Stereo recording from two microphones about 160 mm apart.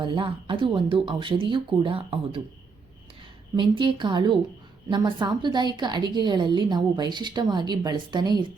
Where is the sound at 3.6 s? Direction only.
30° right (ahead or behind).